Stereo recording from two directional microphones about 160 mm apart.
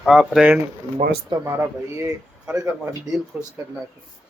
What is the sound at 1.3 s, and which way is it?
Speech, 20° right (ahead or behind).